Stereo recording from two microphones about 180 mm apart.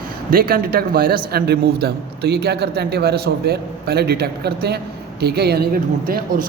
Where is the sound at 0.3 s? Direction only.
55° right (ahead or behind).